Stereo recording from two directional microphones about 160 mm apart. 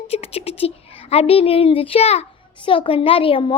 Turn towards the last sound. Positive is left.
turn(degrees=35)  # may be behind; listen again after turning